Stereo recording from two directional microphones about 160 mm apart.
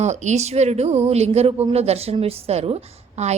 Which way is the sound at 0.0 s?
45° right (ahead or behind).